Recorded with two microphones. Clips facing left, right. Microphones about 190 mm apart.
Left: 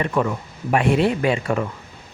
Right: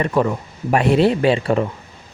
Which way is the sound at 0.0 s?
35° right (ahead or behind).